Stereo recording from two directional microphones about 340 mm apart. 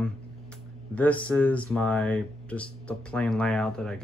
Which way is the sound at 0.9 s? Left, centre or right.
Centre.